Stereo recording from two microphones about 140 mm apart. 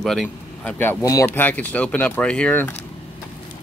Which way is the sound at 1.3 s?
10° left (ahead or behind).